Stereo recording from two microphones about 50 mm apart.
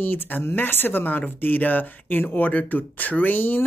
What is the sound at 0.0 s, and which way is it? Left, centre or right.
Speech, left.